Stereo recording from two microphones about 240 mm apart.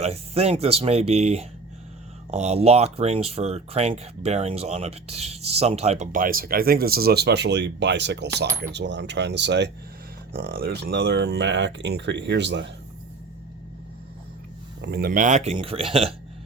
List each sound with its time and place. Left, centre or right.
0.0 s speech: right
14.8 s speech: right